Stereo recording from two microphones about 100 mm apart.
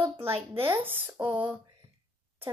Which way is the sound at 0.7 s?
20° right (ahead or behind).